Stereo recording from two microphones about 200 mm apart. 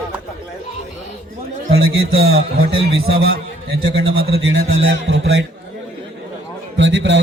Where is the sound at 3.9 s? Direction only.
55° right (ahead or behind).